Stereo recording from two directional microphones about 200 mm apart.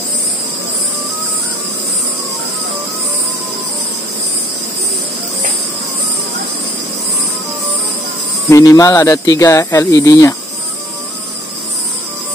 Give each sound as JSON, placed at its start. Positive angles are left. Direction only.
{"t": 8.5, "sound": "speech", "side_deg": 15}